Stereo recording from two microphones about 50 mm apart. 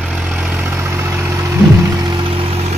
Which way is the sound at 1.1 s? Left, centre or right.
Right.